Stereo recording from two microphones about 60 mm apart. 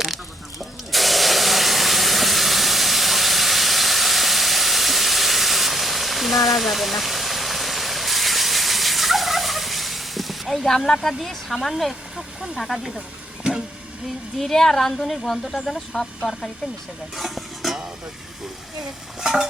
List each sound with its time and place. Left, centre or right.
0.9 s spray: centre
6.5 s engine: centre
11.1 s speech: centre
13.4 s vehicle: centre
14.3 s speech: centre
17.2 s stir: centre
19.2 s stir: centre